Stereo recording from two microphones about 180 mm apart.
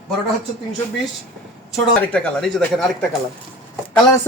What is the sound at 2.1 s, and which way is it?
Speech, 5° left (ahead or behind).